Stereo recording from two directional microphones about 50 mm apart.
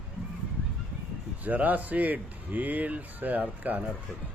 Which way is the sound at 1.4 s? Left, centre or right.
Right.